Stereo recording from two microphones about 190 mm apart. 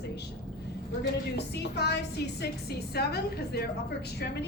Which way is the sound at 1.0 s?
65° left (ahead or behind).